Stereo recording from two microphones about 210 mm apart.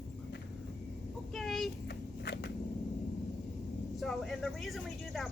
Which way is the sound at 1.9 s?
50° left (ahead or behind).